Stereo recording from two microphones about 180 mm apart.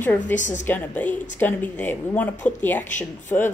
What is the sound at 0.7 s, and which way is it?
Speech, 10° left (ahead or behind).